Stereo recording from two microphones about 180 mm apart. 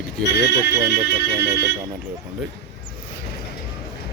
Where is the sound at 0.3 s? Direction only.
70° left (ahead or behind).